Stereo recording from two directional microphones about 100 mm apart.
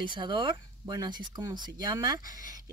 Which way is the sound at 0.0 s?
50° right (ahead or behind).